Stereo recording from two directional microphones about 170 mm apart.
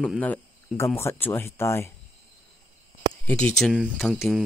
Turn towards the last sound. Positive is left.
turn(degrees=0)  # may be behind; listen again after turning